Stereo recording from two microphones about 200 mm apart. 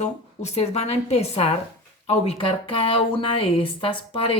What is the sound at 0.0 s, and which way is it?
A woman's voice, 35° left (ahead or behind).